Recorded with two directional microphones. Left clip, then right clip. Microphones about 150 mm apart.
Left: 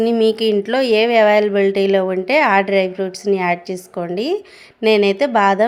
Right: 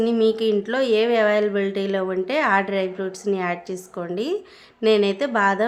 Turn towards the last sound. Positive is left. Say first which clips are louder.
# left 6 dB
turn(degrees=25)  # may be behind; listen again after turning